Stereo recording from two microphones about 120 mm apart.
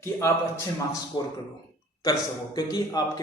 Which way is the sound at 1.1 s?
40° left (ahead or behind).